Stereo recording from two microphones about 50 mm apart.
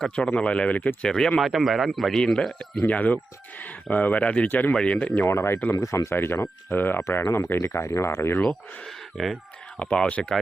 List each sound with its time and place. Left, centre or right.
0.0 s speech: centre
1.0 s a man's voice: centre
1.4 s a man's voice: centre
2.8 s speech: left
4.4 s speech: left
4.7 s speech: centre
5.3 s speech: left
5.8 s speech: left
6.1 s speech: left
7.3 s speech: left
9.1 s a man's voice: centre
9.7 s speech: left